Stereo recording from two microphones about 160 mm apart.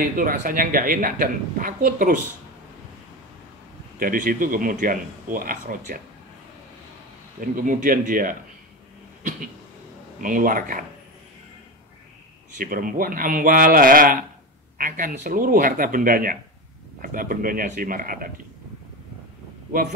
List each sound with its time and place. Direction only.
0.0 s a woman's voice: 60° right (ahead or behind)
4.0 s a woman's voice: 60° right (ahead or behind)
7.3 s a woman's voice: 60° right (ahead or behind)
10.2 s a woman's voice: 55° right (ahead or behind)
12.5 s a woman's voice: 60° right (ahead or behind)